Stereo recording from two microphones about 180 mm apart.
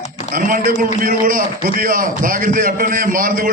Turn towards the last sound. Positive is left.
turn(degrees=-50)  # may be behind; listen again after turning